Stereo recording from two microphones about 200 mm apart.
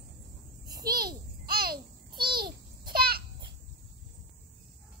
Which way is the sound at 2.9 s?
50° right (ahead or behind).